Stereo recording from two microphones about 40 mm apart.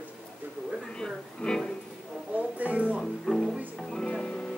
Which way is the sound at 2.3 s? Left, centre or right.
Right.